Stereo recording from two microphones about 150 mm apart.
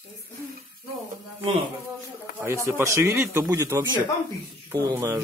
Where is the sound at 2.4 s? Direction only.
15° right (ahead or behind).